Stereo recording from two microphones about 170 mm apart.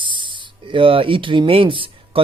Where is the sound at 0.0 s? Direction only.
30° right (ahead or behind).